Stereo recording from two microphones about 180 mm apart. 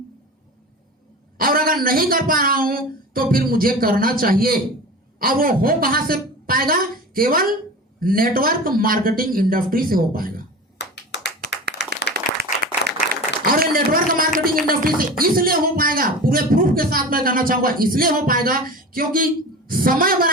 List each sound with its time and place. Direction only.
1.4 s a woman's voice: 55° right (ahead or behind)
10.8 s clapping: 70° left (ahead or behind)
12.1 s clapping: 65° right (ahead or behind)
13.5 s a sound: 55° right (ahead or behind)
15.2 s a man's voice: 55° right (ahead or behind)